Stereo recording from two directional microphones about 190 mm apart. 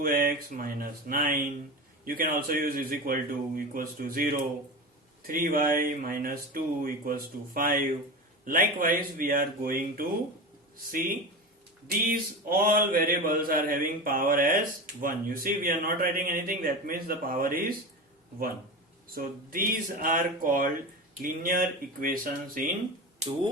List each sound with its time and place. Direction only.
0.0 s speech: 50° right (ahead or behind)
11.9 s speech: 50° right (ahead or behind)
19.1 s speech: 50° right (ahead or behind)